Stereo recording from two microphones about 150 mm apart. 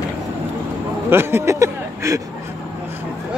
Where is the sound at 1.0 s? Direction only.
15° right (ahead or behind).